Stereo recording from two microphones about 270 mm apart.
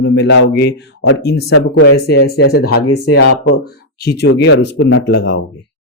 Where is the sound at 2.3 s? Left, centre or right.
Left.